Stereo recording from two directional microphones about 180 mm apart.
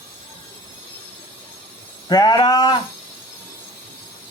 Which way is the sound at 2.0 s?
20° left (ahead or behind).